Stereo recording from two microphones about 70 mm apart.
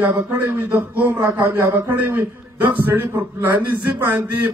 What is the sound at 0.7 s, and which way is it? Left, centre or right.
A man's voice, right.